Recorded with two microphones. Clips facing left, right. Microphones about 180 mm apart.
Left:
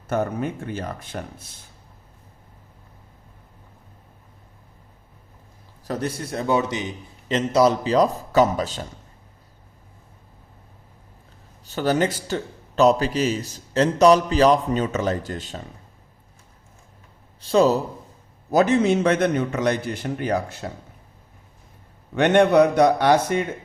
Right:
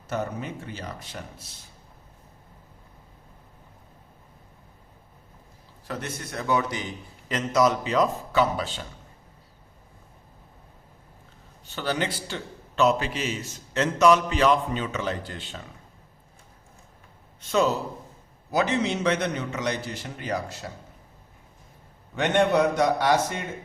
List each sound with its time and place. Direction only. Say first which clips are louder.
0.1 s a man's voice: left 6 dB; 55° left (ahead or behind)
5.9 s a man's voice: left 7 dB; 35° left (ahead or behind)
11.6 s a man's voice: left 7 dB; 40° left (ahead or behind)
17.4 s a man's voice: left 6 dB; 35° left (ahead or behind)
18.5 s a man's voice: left 7 dB; 50° left (ahead or behind)
22.1 s a man's voice: left 6 dB; 65° left (ahead or behind)